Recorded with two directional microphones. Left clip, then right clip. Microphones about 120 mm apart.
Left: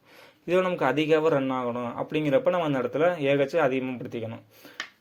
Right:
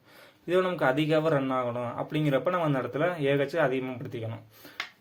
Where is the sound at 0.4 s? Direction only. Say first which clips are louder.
Left 1 dB; 20° left (ahead or behind).